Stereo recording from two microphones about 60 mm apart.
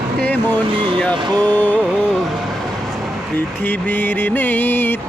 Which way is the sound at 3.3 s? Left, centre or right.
Left.